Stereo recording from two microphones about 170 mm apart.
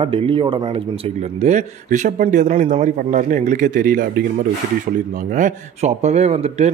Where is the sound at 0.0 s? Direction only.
35° right (ahead or behind); by 4.1 s 50° right (ahead or behind).